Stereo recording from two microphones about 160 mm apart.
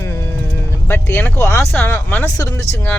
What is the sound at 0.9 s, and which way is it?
Speech, 15° left (ahead or behind).